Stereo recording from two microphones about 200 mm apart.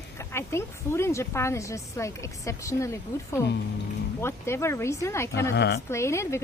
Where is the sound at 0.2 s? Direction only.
15° left (ahead or behind).